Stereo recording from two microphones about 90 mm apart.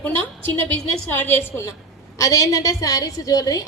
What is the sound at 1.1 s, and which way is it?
A woman's voice, 25° left (ahead or behind).